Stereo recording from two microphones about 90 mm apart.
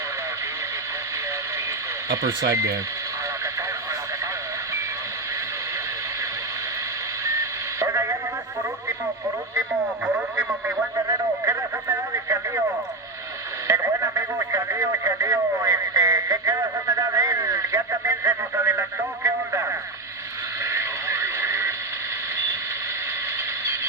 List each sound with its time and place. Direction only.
2.2 s speech: 35° right (ahead or behind)
7.3 s radio: 35° right (ahead or behind)
10.9 s radio: 40° right (ahead or behind)
13.7 s radio: 35° right (ahead or behind)